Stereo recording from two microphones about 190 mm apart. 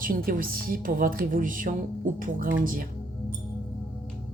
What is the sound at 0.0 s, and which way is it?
A woman's voice, 45° right (ahead or behind).